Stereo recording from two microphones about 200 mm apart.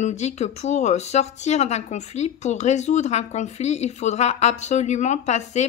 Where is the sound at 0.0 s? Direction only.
35° left (ahead or behind).